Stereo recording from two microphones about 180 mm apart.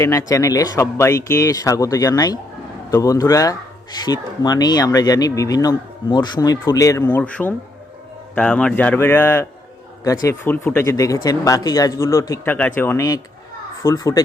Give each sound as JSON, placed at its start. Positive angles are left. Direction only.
{"t": 0.0, "sound": "speech", "side_deg": 15}